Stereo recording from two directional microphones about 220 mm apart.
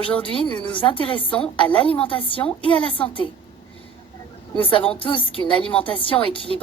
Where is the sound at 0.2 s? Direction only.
20° left (ahead or behind).